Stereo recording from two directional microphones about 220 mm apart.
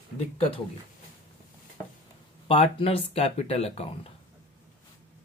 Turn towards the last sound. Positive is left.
turn(degrees=25)  # may be behind; listen again after turning